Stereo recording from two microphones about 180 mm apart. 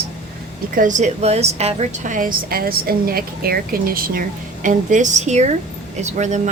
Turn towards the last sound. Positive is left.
turn(degrees=-40)  # may be behind; listen again after turning